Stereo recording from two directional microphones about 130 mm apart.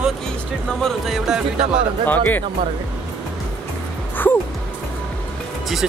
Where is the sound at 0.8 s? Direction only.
5° right (ahead or behind).